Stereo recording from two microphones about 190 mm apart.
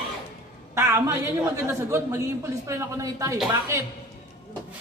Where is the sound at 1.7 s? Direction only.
15° right (ahead or behind).